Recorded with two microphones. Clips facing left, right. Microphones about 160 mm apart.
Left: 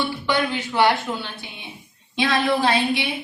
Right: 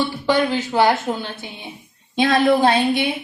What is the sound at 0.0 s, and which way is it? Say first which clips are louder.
Speech: right 4 dB; 40° right (ahead or behind).